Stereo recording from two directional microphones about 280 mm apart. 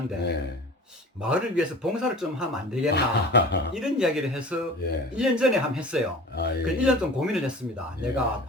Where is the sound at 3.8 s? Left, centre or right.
Centre.